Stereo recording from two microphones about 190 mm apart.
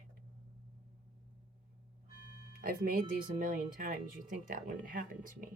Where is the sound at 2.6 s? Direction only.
50° right (ahead or behind).